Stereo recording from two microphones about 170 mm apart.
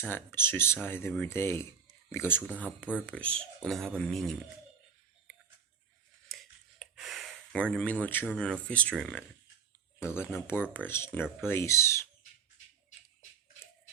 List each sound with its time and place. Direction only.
0.0 s speech: 10° left (ahead or behind)
6.2 s a sound: centre (ahead or behind)
8.6 s speech: 5° left (ahead or behind)
10.0 s speech: 15° left (ahead or behind)